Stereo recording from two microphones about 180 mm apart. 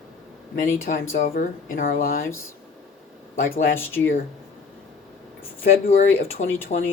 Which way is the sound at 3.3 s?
50° left (ahead or behind).